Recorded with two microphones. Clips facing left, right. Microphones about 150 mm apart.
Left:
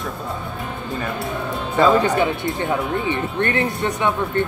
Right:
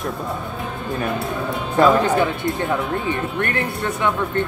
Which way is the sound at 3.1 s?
20° left (ahead or behind).